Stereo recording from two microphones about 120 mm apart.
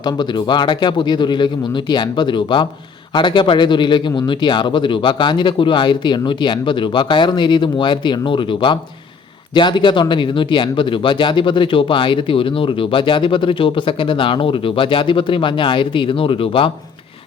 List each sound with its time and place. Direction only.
0.0 s speech: 40° left (ahead or behind)